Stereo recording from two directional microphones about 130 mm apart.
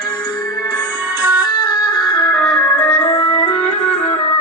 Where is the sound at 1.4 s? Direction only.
30° left (ahead or behind).